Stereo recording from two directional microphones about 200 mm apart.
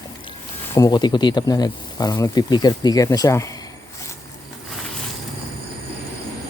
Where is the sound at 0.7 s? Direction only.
20° left (ahead or behind).